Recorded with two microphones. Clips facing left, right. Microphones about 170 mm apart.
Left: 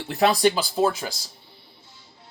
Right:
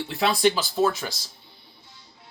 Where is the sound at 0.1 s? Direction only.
40° left (ahead or behind).